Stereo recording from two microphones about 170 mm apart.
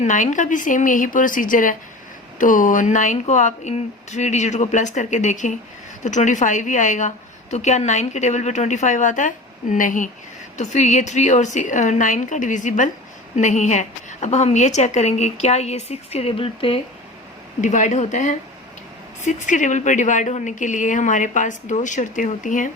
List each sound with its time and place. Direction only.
0.0 s a woman's voice: 45° left (ahead or behind)
17.6 s speech: 45° left (ahead or behind)